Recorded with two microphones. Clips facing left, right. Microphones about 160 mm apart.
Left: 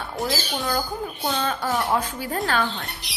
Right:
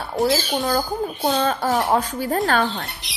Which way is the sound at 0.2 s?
40° right (ahead or behind).